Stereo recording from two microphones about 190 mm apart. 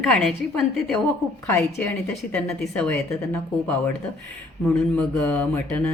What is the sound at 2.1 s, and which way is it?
Speech, centre (ahead or behind).